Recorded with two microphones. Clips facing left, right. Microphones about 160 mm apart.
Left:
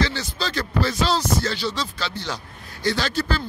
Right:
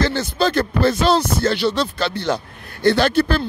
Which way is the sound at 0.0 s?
55° right (ahead or behind).